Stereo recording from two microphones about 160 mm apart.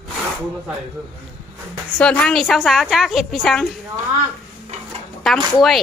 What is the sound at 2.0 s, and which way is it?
A woman's voice, 5° left (ahead or behind).